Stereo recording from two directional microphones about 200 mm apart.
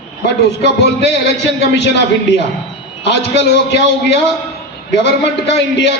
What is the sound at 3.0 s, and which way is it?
A man's voice, 60° left (ahead or behind).